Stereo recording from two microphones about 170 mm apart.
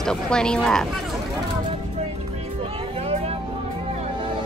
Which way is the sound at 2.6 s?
35° right (ahead or behind).